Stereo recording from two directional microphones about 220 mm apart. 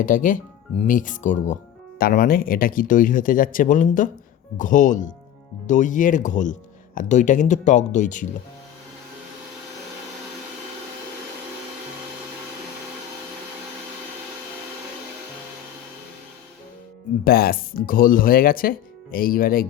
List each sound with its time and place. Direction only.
0.0 s speech: 35° left (ahead or behind)
17.2 s speech: 45° left (ahead or behind)